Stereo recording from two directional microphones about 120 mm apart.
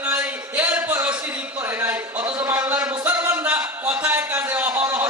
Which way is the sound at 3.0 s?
15° right (ahead or behind).